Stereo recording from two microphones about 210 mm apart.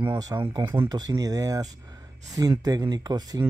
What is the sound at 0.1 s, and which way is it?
Speech, 15° right (ahead or behind).